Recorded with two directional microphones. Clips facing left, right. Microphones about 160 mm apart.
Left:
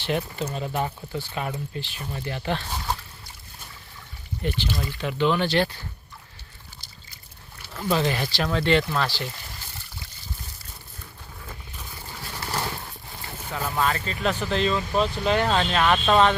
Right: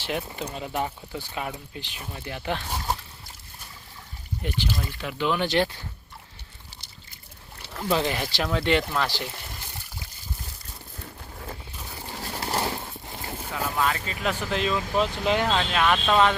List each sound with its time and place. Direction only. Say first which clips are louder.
0.0 s speech: left 3 dB; 10° right (ahead or behind)
4.4 s speech: left 2 dB; 10° right (ahead or behind)
5.5 s speech: left 1 dB; 20° right (ahead or behind)
7.6 s speech: left 1 dB; 20° right (ahead or behind)
12.0 s a sound: right 3 dB; 25° right (ahead or behind)
13.5 s speech: left 1 dB; 5° right (ahead or behind)
15.9 s speech: left 2 dB; 5° left (ahead or behind)